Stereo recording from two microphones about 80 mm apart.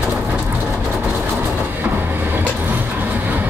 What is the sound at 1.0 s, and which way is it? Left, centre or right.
Train, right.